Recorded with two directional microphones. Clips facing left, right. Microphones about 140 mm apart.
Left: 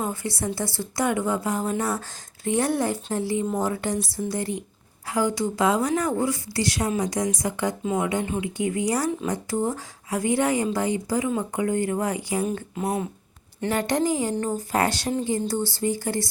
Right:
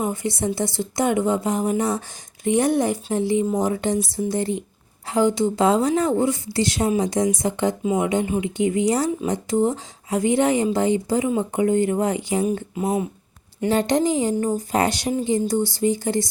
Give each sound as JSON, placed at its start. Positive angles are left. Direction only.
{"t": 0.0, "sound": "speech", "side_deg": -20}
{"t": 12.7, "sound": "speech", "side_deg": 0}
{"t": 13.7, "sound": "speech", "side_deg": -20}